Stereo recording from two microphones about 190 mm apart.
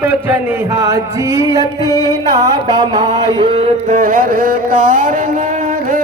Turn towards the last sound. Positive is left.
turn(degrees=-45)  # may be behind; listen again after turning